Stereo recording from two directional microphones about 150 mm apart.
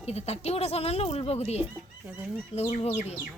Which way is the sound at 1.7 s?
10° right (ahead or behind).